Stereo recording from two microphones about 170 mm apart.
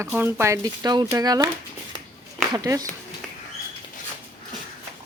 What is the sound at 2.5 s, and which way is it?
Speech, 20° right (ahead or behind).